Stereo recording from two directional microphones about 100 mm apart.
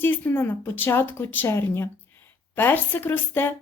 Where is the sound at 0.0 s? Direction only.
20° left (ahead or behind).